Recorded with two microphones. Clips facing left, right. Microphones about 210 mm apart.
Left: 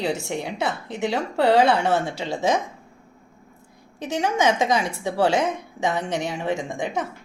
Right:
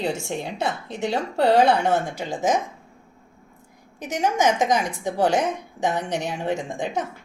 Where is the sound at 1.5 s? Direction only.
60° left (ahead or behind).